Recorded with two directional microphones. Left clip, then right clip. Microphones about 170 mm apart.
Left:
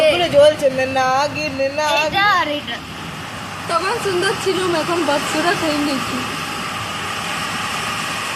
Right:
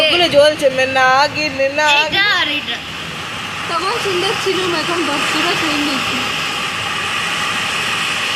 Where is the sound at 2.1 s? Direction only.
55° left (ahead or behind).